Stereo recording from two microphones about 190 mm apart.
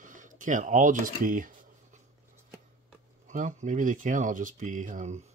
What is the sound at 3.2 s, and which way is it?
Speech, 40° right (ahead or behind).